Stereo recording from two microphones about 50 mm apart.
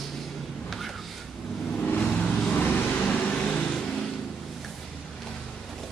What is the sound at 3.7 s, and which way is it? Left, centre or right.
Vehicle, centre.